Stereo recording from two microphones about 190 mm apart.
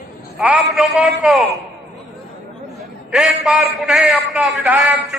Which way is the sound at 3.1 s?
Centre (ahead or behind).